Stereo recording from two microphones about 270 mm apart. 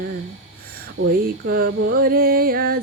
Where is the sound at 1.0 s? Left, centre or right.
Right.